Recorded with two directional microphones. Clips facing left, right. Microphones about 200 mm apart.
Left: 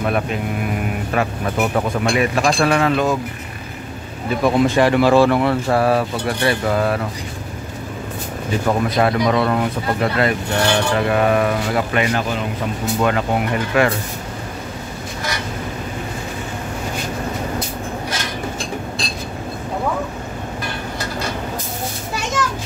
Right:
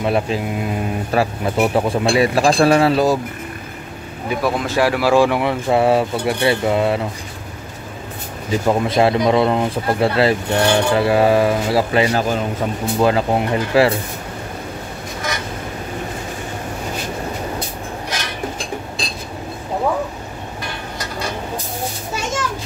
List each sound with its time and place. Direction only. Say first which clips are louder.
0.0 s speech: right 2 dB; 25° right (ahead or behind)
4.3 s speech: left 4 dB; 5° right (ahead or behind); by 7.0 s 25° right (ahead or behind)
8.6 s speech: right 2 dB; 25° right (ahead or behind)